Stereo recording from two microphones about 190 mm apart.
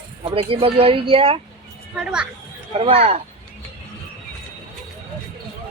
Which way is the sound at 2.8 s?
30° right (ahead or behind).